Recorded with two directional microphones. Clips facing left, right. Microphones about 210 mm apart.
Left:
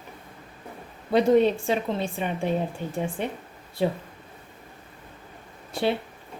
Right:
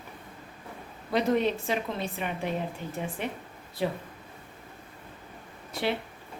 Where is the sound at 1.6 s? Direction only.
30° left (ahead or behind).